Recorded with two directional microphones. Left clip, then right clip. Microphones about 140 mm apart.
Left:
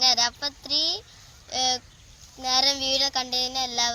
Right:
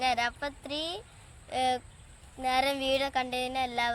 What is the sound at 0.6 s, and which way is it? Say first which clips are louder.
A child's voice: left 9 dB; 45° right (ahead or behind).